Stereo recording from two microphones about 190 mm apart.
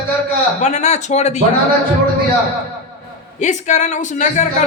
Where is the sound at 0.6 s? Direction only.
35° left (ahead or behind).